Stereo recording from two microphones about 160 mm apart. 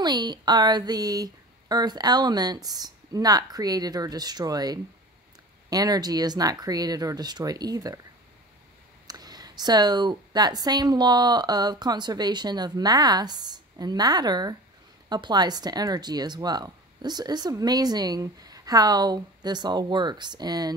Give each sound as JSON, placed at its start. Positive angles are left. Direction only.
{"t": 0.0, "sound": "speech", "side_deg": -25}
{"t": 9.0, "sound": "speech", "side_deg": -25}